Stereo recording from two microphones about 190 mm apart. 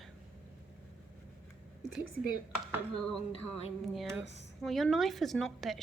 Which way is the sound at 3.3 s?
30° left (ahead or behind).